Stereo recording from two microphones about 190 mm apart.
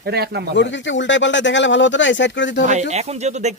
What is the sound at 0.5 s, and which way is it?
Speech, 70° left (ahead or behind).